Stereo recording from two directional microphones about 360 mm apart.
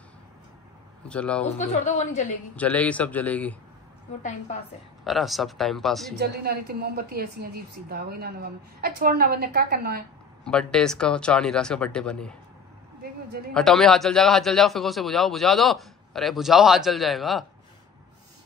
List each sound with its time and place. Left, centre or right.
1.0 s a man's voice: centre
1.6 s a woman's voice: centre
2.5 s a man's voice: centre
5.0 s a man's voice: centre
6.1 s a woman's voice: right
10.4 s a man's voice: centre
13.5 s a man's voice: centre